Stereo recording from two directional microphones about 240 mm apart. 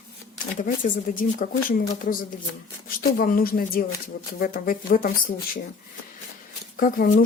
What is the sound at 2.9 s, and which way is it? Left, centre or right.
Speech, left.